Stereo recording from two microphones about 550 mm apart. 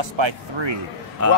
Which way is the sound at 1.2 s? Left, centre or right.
Right.